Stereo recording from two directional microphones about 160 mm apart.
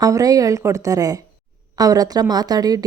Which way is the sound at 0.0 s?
20° right (ahead or behind).